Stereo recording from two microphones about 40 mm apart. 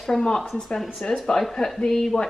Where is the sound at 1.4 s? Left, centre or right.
Centre.